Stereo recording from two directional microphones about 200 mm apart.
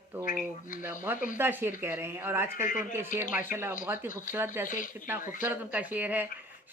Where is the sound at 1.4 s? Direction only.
10° right (ahead or behind).